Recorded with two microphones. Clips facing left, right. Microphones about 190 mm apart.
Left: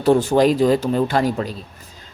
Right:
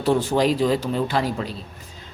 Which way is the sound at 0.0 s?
45° left (ahead or behind).